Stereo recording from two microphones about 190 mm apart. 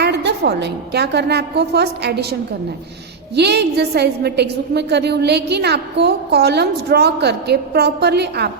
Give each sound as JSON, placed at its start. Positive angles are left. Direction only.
{"t": 0.0, "sound": "a woman's voice", "side_deg": -60}
{"t": 3.3, "sound": "a woman's voice", "side_deg": -60}